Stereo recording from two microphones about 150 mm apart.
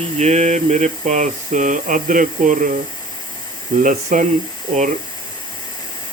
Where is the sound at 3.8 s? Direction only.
60° right (ahead or behind).